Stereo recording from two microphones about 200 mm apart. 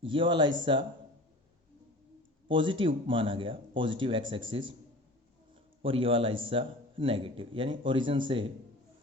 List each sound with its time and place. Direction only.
0.0 s a man's voice: 25° right (ahead or behind)
2.5 s a man's voice: 25° right (ahead or behind)
5.8 s a man's voice: 25° right (ahead or behind)